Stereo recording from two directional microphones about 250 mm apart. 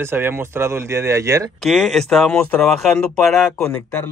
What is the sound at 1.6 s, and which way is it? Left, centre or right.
Speech, centre.